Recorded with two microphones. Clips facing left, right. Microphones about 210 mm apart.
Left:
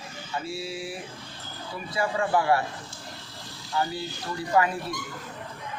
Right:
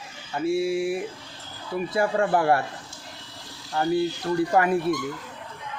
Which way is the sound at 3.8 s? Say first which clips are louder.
Right 7 dB; 50° right (ahead or behind).